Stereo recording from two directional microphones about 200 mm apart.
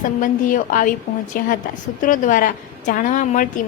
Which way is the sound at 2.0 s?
40° left (ahead or behind).